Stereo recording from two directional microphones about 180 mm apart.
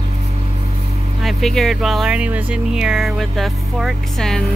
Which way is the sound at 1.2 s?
Centre (ahead or behind).